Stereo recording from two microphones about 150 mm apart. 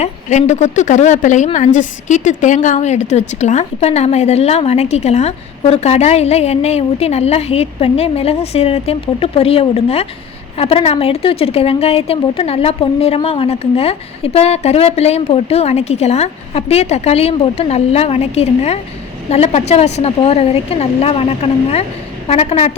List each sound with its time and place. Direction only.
0.0 s a woman's voice: 50° left (ahead or behind)